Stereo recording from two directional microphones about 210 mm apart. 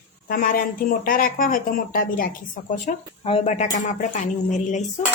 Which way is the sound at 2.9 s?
30° left (ahead or behind).